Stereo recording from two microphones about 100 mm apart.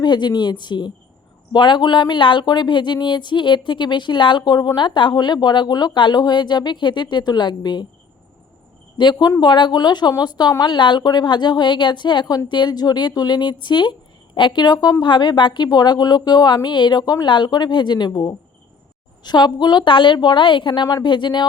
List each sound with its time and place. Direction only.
0.0 s speech: 50° left (ahead or behind)
9.0 s speech: 45° left (ahead or behind)
17.0 s speech: 35° left (ahead or behind)
17.2 s speech: 50° left (ahead or behind)